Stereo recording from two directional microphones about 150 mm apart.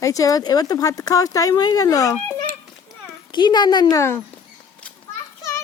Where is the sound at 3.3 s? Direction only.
30° left (ahead or behind).